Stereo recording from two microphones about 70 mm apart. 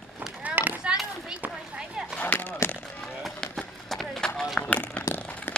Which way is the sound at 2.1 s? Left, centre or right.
Left.